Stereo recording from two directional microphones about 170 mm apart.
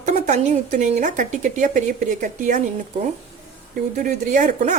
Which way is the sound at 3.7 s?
55° right (ahead or behind).